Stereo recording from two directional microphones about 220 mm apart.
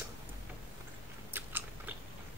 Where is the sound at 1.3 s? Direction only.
10° right (ahead or behind).